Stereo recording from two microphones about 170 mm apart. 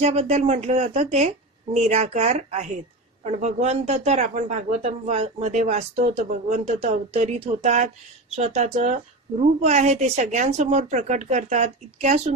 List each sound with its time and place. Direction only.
0.0 s a woman's voice: 40° right (ahead or behind)